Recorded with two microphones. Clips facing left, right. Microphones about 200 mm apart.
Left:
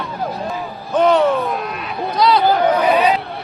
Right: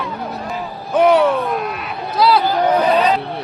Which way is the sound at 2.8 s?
10° left (ahead or behind).